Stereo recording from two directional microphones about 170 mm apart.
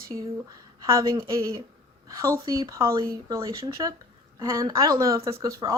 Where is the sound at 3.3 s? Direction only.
30° right (ahead or behind).